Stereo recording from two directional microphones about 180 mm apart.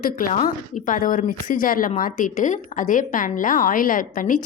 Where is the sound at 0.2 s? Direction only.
50° left (ahead or behind).